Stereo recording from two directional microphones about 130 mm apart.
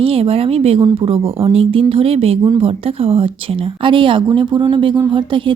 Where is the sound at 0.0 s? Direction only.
45° right (ahead or behind).